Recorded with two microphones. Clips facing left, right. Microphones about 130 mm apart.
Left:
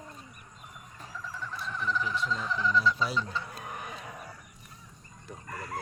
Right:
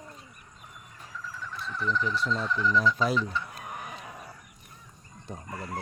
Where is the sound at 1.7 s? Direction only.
5° left (ahead or behind).